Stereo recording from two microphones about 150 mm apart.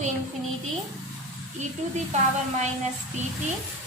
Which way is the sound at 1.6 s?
50° right (ahead or behind).